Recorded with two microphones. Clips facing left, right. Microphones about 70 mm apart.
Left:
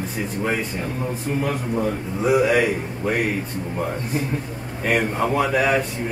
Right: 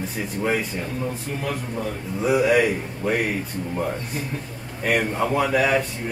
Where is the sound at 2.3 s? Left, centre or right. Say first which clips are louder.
Even; centre.